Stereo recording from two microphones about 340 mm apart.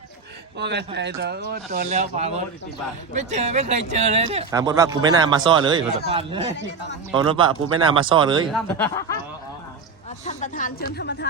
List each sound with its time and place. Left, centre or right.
0.6 s speech: right; by 8.4 s centre
8.5 s speech: centre
10.2 s speech: left